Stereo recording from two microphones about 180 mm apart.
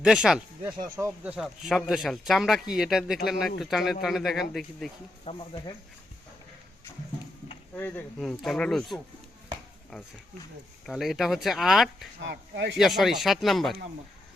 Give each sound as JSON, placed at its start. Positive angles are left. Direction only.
{"t": 0.0, "sound": "speech", "side_deg": -5}
{"t": 5.2, "sound": "speech", "side_deg": 30}
{"t": 7.8, "sound": "speech", "side_deg": 10}
{"t": 12.3, "sound": "speech", "side_deg": -75}
{"t": 12.7, "sound": "speech", "side_deg": 0}